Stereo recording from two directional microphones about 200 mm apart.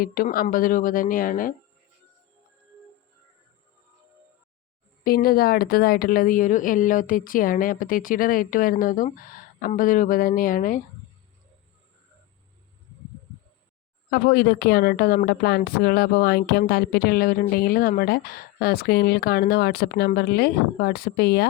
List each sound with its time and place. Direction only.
0.0 s a woman's voice: 45° left (ahead or behind)
5.0 s a woman's voice: 50° left (ahead or behind)
14.1 s a woman's voice: 50° left (ahead or behind)